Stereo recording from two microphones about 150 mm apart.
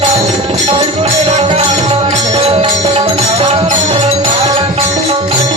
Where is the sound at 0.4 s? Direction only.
35° right (ahead or behind).